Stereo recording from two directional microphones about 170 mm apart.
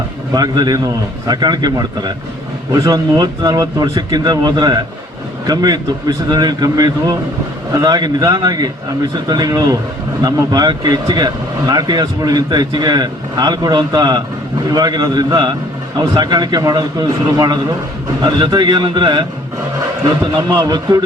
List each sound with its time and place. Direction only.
0.3 s speech: 25° right (ahead or behind)
20.3 s speech: 25° right (ahead or behind)